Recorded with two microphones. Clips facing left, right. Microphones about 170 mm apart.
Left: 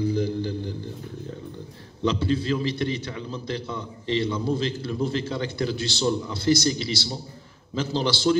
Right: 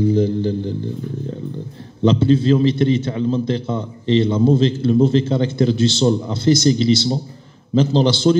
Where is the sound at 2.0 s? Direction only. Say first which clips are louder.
Right 9 dB; 25° right (ahead or behind).